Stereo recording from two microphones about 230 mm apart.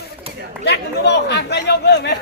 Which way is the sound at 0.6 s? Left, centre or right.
Left.